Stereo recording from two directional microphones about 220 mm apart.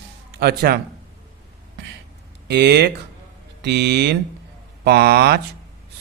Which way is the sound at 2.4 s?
50° right (ahead or behind).